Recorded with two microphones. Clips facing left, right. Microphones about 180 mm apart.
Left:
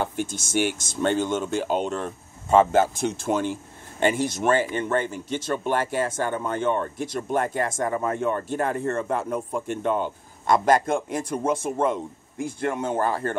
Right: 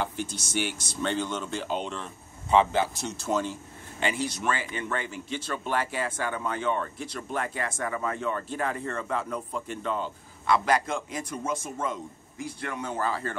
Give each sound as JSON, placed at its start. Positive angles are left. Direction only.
{"t": 0.0, "sound": "speech", "side_deg": 50}